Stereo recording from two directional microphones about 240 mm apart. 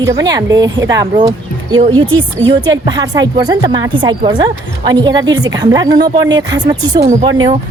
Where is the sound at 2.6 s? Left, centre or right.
Centre.